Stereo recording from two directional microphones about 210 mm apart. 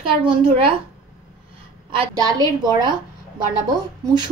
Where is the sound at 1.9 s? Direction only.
20° right (ahead or behind).